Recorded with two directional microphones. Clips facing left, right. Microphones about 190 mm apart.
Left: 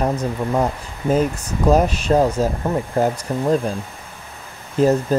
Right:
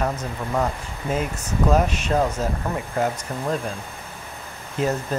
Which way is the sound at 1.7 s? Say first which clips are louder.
Left 6 dB; 35° left (ahead or behind).